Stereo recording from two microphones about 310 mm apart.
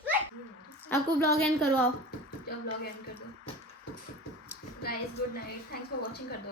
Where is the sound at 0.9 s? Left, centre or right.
Centre.